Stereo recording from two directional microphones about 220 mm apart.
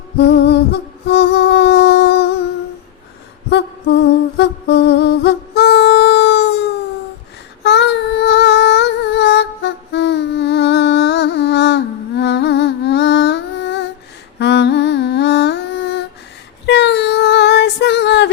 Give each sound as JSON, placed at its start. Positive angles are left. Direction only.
{"t": 0.2, "sound": "music", "side_deg": 50}
{"t": 3.5, "sound": "a sound", "side_deg": 50}
{"t": 7.6, "sound": "singing", "side_deg": 50}
{"t": 14.3, "sound": "humming", "side_deg": 50}
{"t": 16.6, "sound": "child singing", "side_deg": 50}